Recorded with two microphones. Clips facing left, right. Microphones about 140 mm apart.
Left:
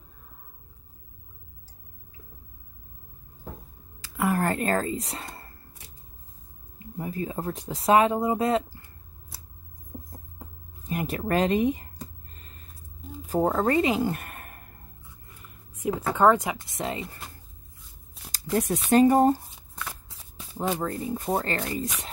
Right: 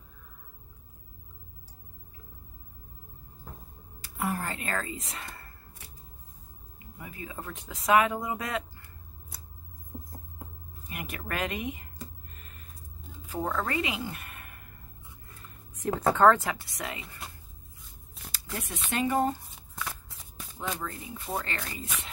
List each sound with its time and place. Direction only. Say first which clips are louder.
4.0 s a sound: left 7 dB; 85° left
4.5 s speech: left 9 dB; 40° left (ahead or behind)
7.0 s speech: left 10 dB; 40° left (ahead or behind)
10.9 s a sound: left 10 dB; 30° left (ahead or behind)
13.3 s speech: left 8 dB; 35° left (ahead or behind)
14.0 s a sound: left 10 dB; 50° left (ahead or behind)
16.2 s speech: left 2 dB; 15° left (ahead or behind)
18.3 s speech: left 13 dB; 40° left (ahead or behind)
20.5 s speech: left 8 dB; 35° left (ahead or behind)